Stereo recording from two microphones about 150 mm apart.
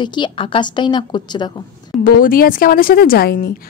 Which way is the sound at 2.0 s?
70° left (ahead or behind).